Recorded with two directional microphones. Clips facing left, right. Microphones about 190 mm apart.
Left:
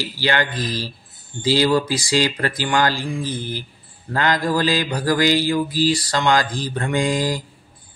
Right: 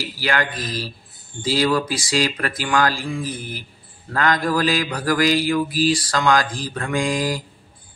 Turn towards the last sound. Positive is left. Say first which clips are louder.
# left 1 dB
turn(degrees=25)  # may be behind; listen again after turning